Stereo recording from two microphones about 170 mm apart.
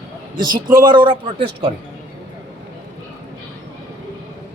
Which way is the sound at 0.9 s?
30° right (ahead or behind).